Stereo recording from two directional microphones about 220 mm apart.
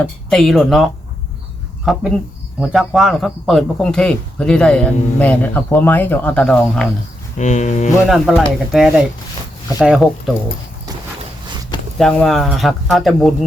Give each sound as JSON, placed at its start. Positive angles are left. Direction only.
{"t": 0.0, "sound": "speech", "side_deg": 5}
{"t": 7.3, "sound": "a sound", "side_deg": 30}
{"t": 8.1, "sound": "speech", "side_deg": 0}
{"t": 11.9, "sound": "speech", "side_deg": 0}